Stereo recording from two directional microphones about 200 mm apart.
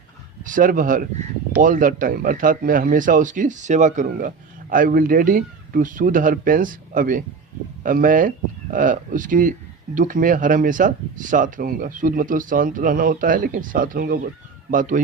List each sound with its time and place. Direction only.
0.4 s speech: 40° right (ahead or behind)